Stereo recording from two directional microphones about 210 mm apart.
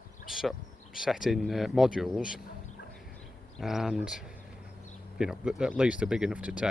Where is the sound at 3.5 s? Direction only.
Centre (ahead or behind).